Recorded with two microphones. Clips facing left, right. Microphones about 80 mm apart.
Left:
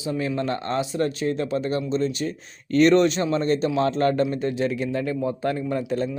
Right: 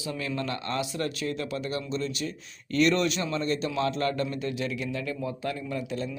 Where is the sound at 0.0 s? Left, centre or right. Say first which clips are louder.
Left 6 dB; left.